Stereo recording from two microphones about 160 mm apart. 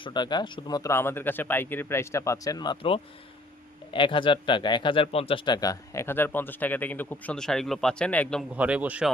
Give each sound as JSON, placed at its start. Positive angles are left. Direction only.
{"t": 0.0, "sound": "speech", "side_deg": 30}
{"t": 8.5, "sound": "a man's voice", "side_deg": -10}